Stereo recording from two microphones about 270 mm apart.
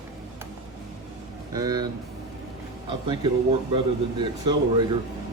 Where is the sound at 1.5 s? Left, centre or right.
Centre.